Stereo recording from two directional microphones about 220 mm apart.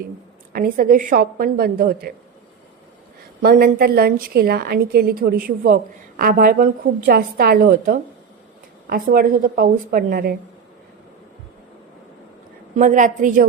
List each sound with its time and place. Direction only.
0.5 s a woman's voice: 40° right (ahead or behind)
3.4 s a woman's voice: 45° right (ahead or behind)
12.7 s a woman's voice: 35° right (ahead or behind)